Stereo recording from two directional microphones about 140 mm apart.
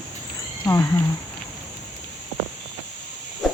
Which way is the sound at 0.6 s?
20° left (ahead or behind).